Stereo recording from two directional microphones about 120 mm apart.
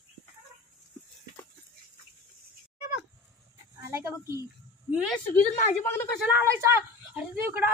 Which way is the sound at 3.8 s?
25° right (ahead or behind).